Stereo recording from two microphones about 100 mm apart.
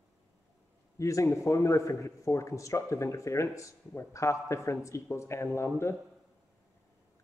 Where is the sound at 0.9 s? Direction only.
30° left (ahead or behind).